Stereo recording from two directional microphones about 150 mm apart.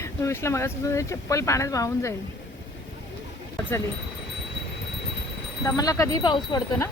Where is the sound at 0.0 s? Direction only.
20° left (ahead or behind).